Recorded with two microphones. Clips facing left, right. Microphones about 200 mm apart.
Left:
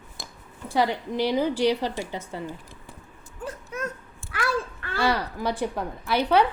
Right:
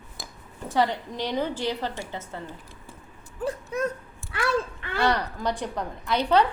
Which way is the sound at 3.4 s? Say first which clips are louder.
Right 5 dB; 35° right (ahead or behind).